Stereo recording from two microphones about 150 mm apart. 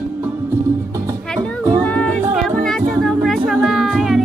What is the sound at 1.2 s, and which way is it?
Music, 5° left (ahead or behind).